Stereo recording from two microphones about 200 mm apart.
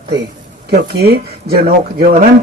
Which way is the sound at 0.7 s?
50° right (ahead or behind).